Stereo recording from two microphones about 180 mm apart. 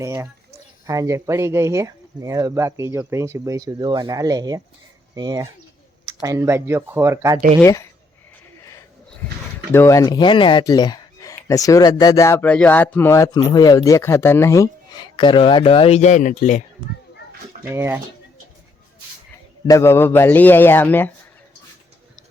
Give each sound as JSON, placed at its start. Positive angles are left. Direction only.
{"t": 0.0, "sound": "speech", "side_deg": -15}
{"t": 7.6, "sound": "a man's voice", "side_deg": 15}
{"t": 9.7, "sound": "speech", "side_deg": 15}
{"t": 17.6, "sound": "speech", "side_deg": -10}
{"t": 19.6, "sound": "a man's voice", "side_deg": 15}